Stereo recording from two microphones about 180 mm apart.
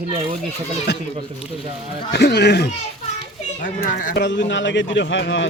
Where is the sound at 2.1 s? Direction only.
65° left (ahead or behind).